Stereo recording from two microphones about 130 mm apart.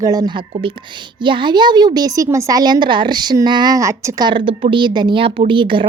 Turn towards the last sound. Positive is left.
turn(degrees=-40)  # may be behind; listen again after turning